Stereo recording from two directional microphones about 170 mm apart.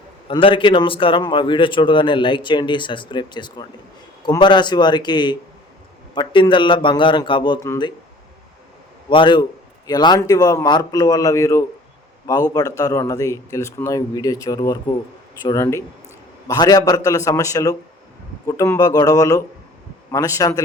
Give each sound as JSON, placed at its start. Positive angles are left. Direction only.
{"t": 0.3, "sound": "a man's voice", "side_deg": 30}
{"t": 9.0, "sound": "a man's voice", "side_deg": 30}